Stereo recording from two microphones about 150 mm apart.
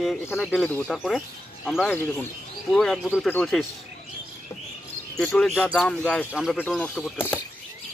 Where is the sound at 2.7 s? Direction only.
Centre (ahead or behind).